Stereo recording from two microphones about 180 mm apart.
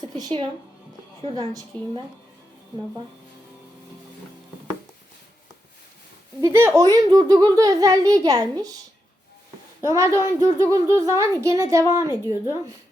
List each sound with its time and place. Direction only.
0.2 s a child's voice: 25° right (ahead or behind)
6.4 s a child's voice: 15° right (ahead or behind)
9.8 s speech: 15° right (ahead or behind)